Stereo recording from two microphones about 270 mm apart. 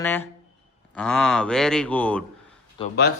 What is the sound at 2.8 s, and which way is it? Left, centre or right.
Speech, centre.